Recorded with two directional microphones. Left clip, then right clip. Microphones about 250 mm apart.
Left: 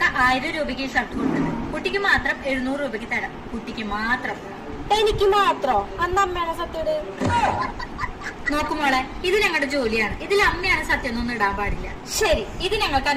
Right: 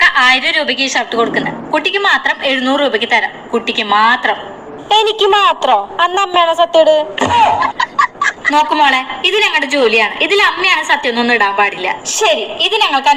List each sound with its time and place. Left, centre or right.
0.0 s a woman's voice: right